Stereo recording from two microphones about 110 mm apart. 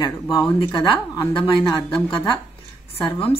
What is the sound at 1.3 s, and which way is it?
Speech, 50° left (ahead or behind).